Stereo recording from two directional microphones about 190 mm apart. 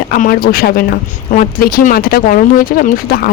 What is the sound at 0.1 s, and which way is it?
Speech, 50° left (ahead or behind).